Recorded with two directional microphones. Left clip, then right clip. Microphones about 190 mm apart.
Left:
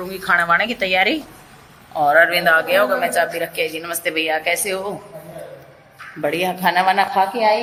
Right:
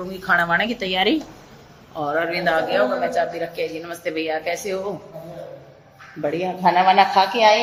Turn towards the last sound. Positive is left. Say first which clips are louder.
# right 2 dB
turn(degrees=5)  # may be behind; listen again after turning